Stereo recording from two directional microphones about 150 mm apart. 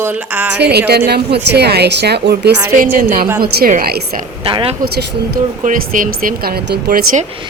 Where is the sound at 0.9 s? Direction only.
90° right.